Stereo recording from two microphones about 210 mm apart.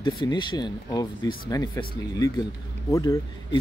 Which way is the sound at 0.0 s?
25° left (ahead or behind).